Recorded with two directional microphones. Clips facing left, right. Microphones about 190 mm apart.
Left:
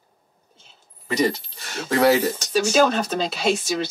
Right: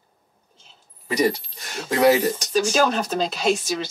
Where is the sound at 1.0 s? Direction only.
10° right (ahead or behind).